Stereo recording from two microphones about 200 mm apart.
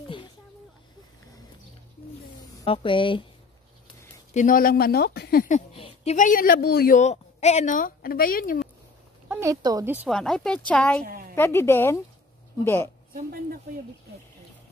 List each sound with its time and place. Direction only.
2.6 s speech: 25° left (ahead or behind)
4.3 s a woman's voice: 40° left (ahead or behind)
5.7 s speech: 30° left (ahead or behind); by 7.0 s 50° left (ahead or behind)
7.0 s a woman's voice: 35° left (ahead or behind)
9.3 s speech: 15° right (ahead or behind)
10.0 s speech: centre (ahead or behind)
11.1 s a sound: 45° right (ahead or behind)
11.3 s speech: 15° left (ahead or behind)